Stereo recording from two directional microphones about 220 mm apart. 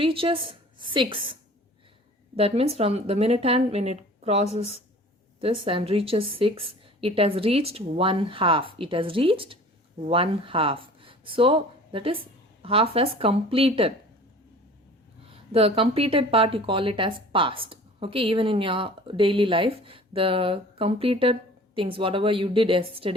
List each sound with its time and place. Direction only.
0.0 s a woman's voice: 25° right (ahead or behind)
15.5 s speech: 25° right (ahead or behind)